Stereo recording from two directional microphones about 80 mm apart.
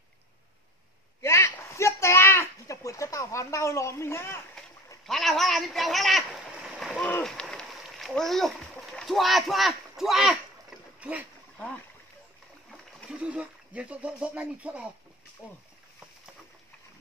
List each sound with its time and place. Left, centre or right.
1.2 s a sound: left
5.0 s a man's voice: centre
7.6 s a sound: centre
8.1 s a child's voice: centre
11.0 s speech: centre
11.5 s speech: centre
13.1 s speech: centre